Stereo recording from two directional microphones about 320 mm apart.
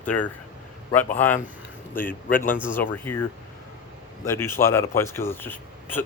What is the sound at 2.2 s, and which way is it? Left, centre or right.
Speech, left.